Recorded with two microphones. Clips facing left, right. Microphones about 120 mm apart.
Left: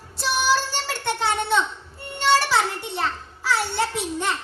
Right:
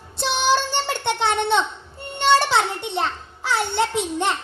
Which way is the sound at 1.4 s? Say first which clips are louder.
Right 2 dB; 20° right (ahead or behind).